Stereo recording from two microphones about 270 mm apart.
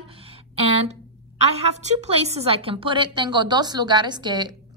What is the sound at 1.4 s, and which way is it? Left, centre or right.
A woman's voice, right.